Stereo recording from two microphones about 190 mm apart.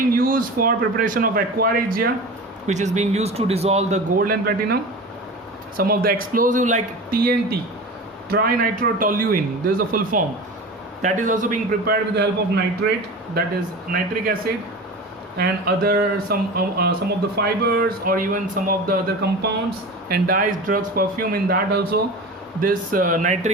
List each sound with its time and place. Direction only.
0.1 s a man's voice: 50° right (ahead or behind)
2.6 s a man's voice: 40° right (ahead or behind); by 12.3 s 55° right (ahead or behind)
12.8 s speech: 65° right (ahead or behind)
13.9 s a man's voice: 50° right (ahead or behind)
18.9 s a man's voice: 60° right (ahead or behind)
22.6 s a man's voice: 45° right (ahead or behind)